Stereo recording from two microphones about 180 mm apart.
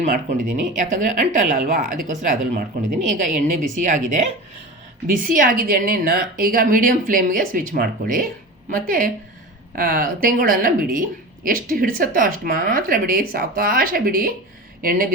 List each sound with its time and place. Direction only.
0.0 s a woman's voice: 45° right (ahead or behind)